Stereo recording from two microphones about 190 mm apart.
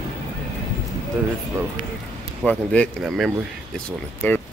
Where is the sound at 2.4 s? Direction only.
5° left (ahead or behind).